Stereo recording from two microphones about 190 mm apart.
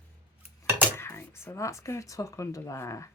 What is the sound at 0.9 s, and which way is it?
Speech, 10° left (ahead or behind).